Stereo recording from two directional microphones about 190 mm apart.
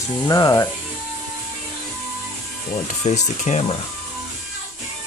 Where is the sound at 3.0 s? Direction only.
35° left (ahead or behind).